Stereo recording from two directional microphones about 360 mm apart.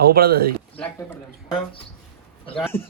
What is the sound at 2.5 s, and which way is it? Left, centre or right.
Speech, centre.